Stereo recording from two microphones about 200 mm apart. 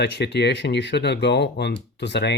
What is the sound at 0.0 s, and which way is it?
Speech, 60° left (ahead or behind).